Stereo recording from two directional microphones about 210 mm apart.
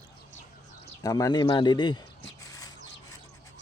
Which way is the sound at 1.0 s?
15° left (ahead or behind).